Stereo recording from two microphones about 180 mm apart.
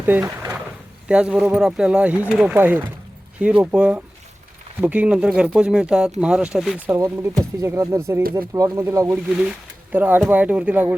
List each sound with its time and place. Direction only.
0.0 s drawer open or close: 10° right (ahead or behind)
1.0 s speech: 5° right (ahead or behind)
6.8 s speech: 15° right (ahead or behind)